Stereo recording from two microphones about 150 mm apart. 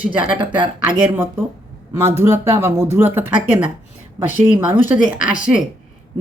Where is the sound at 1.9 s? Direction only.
15° right (ahead or behind).